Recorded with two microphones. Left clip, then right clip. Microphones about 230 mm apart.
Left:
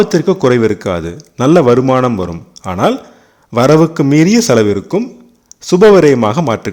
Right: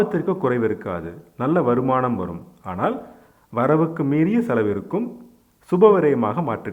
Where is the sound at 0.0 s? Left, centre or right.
Left.